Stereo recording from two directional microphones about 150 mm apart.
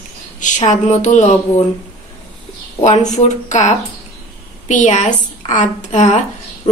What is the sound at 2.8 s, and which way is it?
A woman's voice, 50° left (ahead or behind).